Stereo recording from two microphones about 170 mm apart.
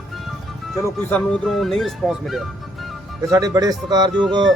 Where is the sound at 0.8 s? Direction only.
5° left (ahead or behind).